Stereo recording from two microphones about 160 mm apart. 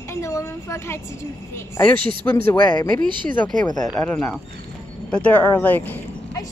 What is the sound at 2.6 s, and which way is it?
Speech, 30° left (ahead or behind).